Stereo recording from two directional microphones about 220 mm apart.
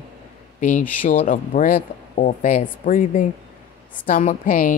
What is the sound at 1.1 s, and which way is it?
Speech, 35° left (ahead or behind).